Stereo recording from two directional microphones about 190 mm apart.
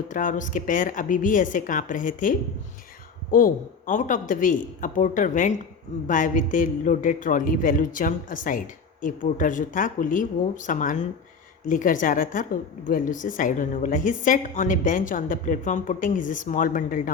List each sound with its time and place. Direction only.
0.1 s a woman's voice: 45° left (ahead or behind)
3.3 s a woman's voice: 45° left (ahead or behind)